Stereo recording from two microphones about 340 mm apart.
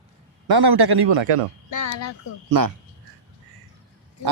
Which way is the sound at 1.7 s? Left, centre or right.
Left.